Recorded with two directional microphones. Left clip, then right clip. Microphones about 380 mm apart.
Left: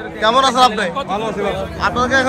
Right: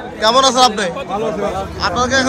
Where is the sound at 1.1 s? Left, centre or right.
Left.